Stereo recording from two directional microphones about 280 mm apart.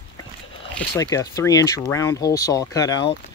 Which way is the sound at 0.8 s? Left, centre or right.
Centre.